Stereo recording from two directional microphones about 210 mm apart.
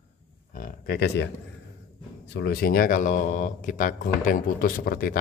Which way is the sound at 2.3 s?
50° left (ahead or behind).